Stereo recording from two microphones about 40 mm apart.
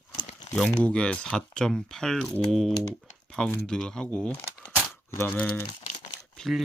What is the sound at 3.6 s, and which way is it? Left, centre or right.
Speech, centre.